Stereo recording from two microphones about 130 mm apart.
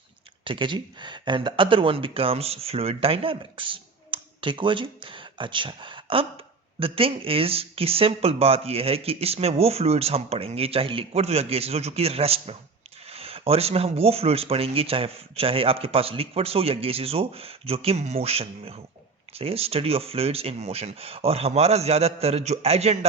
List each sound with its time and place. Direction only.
0.4 s speech: 40° right (ahead or behind)